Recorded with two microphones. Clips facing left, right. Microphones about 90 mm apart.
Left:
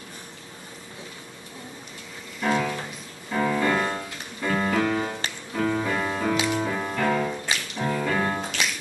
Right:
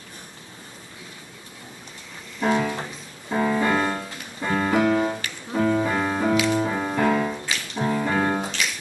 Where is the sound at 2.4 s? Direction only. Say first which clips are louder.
Right 2 dB; 25° right (ahead or behind).